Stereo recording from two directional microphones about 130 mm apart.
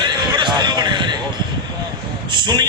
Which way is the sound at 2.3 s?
35° right (ahead or behind).